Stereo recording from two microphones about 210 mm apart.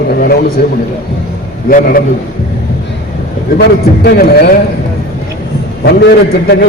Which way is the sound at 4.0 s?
50° left (ahead or behind).